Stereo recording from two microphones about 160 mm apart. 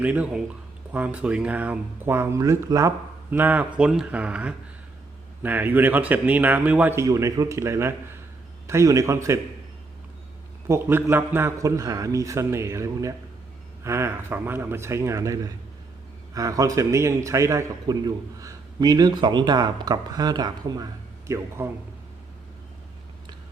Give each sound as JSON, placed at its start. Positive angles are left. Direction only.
{"t": 0.0, "sound": "a man's voice", "side_deg": -10}
{"t": 10.7, "sound": "a man's voice", "side_deg": -15}